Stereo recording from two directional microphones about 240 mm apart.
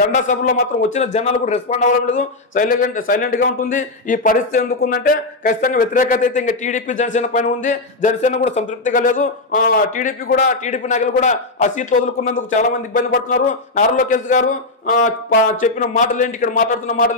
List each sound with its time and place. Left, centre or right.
0.0 s speech: left